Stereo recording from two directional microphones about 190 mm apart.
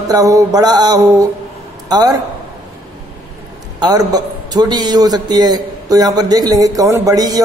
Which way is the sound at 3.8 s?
20° right (ahead or behind).